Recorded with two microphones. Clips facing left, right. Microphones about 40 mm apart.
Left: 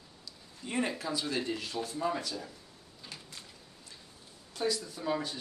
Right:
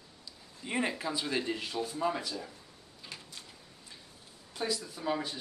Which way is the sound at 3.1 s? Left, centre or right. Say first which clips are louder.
Right 2 dB; centre.